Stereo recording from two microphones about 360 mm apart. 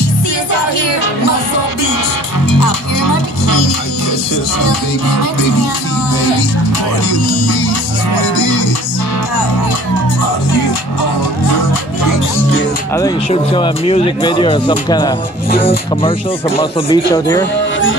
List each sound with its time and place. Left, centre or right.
2.6 s music: left
10.5 s music: left
12.9 s speech: centre
17.6 s speech: left